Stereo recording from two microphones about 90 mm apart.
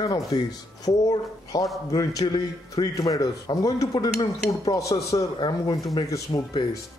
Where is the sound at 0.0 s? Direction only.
50° left (ahead or behind).